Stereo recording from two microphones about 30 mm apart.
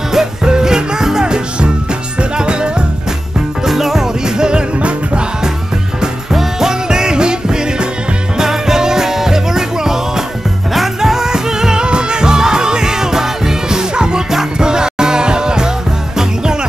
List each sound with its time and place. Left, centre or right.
0.1 s music: centre
1.2 s music: right
3.6 s music: centre
4.4 s music: right
6.3 s music: centre
8.4 s music: centre
11.8 s music: right